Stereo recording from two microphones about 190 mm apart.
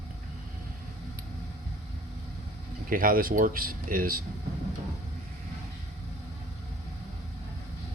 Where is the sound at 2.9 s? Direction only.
50° right (ahead or behind).